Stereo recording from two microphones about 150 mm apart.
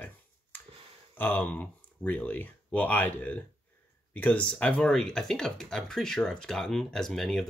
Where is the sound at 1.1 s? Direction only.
10° left (ahead or behind).